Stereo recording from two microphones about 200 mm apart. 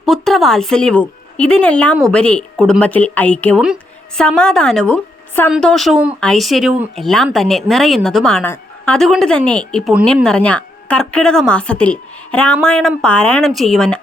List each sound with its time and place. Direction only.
0.0 s a woman's voice: centre (ahead or behind)